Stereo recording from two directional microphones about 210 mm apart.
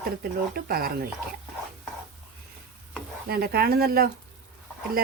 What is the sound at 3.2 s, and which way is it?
Speech, 45° right (ahead or behind).